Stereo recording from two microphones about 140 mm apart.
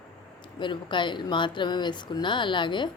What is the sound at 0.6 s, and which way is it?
Speech, 35° left (ahead or behind).